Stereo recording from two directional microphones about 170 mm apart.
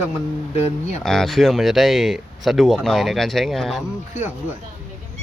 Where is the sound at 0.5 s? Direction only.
35° left (ahead or behind).